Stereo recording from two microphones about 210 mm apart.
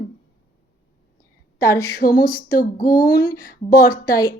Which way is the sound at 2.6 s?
40° left (ahead or behind).